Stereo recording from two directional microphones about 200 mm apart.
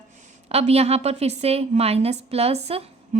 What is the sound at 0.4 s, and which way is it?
A woman's voice, 30° right (ahead or behind).